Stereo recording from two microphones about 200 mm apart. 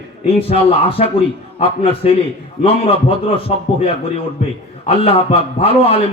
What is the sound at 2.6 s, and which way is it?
Speech, 30° left (ahead or behind).